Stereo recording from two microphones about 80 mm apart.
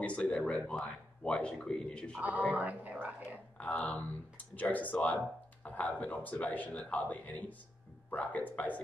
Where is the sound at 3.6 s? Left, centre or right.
Centre.